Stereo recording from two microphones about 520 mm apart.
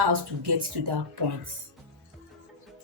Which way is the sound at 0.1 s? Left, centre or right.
Right.